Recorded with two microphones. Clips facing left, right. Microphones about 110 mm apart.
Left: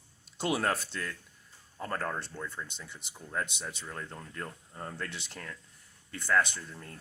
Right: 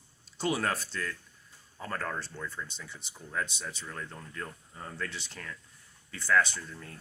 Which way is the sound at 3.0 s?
50° left (ahead or behind).